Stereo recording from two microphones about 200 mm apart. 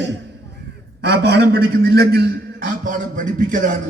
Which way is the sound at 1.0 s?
55° right (ahead or behind).